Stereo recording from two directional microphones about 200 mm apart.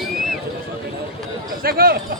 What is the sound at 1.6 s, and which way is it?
Chatter, 50° right (ahead or behind).